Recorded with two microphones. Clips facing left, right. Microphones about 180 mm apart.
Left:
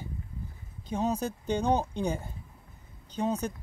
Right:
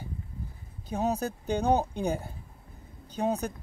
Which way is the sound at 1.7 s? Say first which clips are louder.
Right 2 dB; 10° right (ahead or behind).